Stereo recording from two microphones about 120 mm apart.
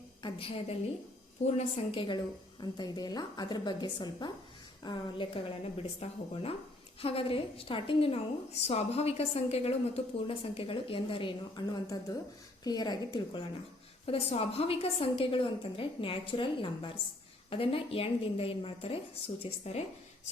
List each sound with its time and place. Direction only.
0.2 s a woman's voice: 45° left (ahead or behind)
8.6 s a woman's voice: 60° left (ahead or behind); by 13.4 s 35° left (ahead or behind)
14.1 s a woman's voice: 55° left (ahead or behind)